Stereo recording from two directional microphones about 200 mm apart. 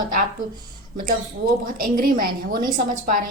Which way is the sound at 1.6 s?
45° right (ahead or behind).